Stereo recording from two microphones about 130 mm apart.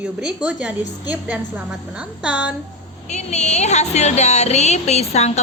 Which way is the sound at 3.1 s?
60° left (ahead or behind).